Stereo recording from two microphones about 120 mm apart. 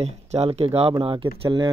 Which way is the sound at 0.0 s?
60° right (ahead or behind).